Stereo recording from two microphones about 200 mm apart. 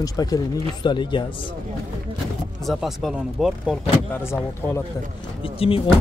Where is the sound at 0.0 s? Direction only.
20° left (ahead or behind).